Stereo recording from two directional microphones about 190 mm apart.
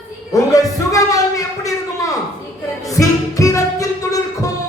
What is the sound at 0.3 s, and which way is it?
Speech, 20° left (ahead or behind).